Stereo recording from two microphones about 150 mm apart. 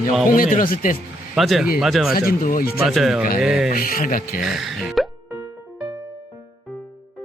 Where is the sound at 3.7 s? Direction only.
75° left (ahead or behind).